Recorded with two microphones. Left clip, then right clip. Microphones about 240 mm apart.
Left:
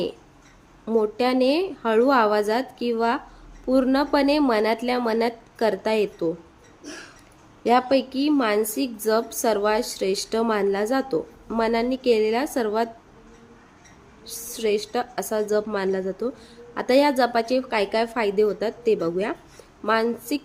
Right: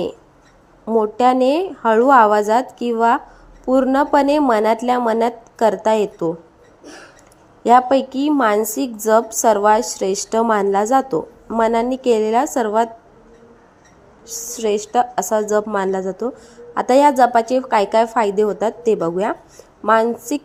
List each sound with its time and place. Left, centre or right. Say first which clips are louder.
0.9 s speech: right 7 dB; centre
7.6 s speech: right 7 dB; centre
14.5 s a woman's voice: right 6 dB; centre